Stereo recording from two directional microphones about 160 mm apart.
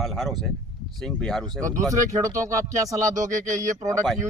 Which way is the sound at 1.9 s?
20° right (ahead or behind).